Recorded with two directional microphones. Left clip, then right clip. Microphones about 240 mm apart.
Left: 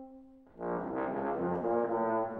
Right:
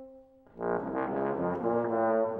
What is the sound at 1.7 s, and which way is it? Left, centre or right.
Brass instrument, right.